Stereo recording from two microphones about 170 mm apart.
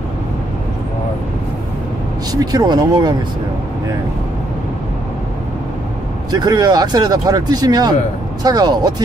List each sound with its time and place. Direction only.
2.3 s speech: 25° right (ahead or behind)
6.3 s speech: 25° right (ahead or behind)